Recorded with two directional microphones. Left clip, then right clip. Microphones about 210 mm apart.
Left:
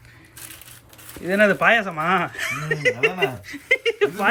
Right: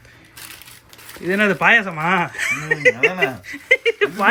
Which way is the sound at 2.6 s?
40° left (ahead or behind).